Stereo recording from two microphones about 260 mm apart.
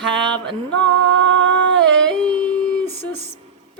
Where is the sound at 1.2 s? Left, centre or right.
Right.